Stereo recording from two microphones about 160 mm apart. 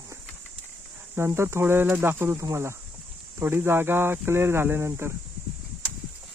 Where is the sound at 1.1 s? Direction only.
15° right (ahead or behind).